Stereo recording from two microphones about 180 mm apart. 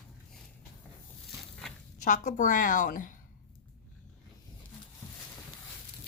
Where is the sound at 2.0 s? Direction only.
45° left (ahead or behind).